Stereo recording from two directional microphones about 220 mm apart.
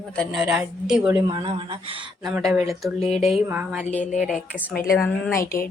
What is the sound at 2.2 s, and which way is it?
Speech, centre (ahead or behind).